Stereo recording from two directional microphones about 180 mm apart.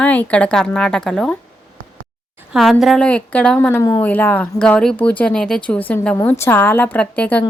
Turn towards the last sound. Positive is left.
turn(degrees=10)  # may be behind; listen again after turning